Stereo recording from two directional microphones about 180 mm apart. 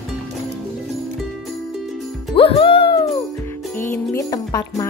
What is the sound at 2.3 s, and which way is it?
Music, 30° left (ahead or behind).